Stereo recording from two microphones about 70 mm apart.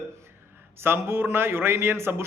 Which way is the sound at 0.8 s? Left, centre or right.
Right.